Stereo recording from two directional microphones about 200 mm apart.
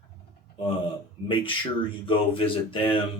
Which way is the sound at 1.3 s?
25° left (ahead or behind).